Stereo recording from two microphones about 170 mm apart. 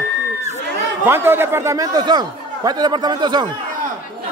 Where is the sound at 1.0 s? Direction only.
15° right (ahead or behind).